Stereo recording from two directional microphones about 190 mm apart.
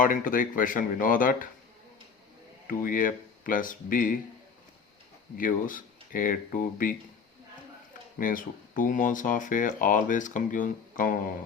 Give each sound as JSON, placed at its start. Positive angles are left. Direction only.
{"t": 0.0, "sound": "speech", "side_deg": 45}
{"t": 2.6, "sound": "speech", "side_deg": 45}
{"t": 5.4, "sound": "speech", "side_deg": 45}
{"t": 8.2, "sound": "speech", "side_deg": 45}